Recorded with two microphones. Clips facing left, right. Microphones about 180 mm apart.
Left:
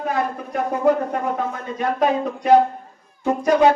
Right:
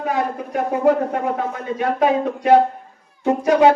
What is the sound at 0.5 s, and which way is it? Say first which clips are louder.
Speech: right 2 dB; 10° right (ahead or behind).